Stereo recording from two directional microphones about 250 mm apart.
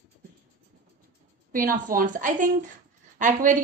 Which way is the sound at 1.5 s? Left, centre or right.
Right.